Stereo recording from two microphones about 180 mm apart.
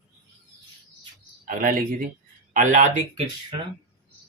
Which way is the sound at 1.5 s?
50° right (ahead or behind).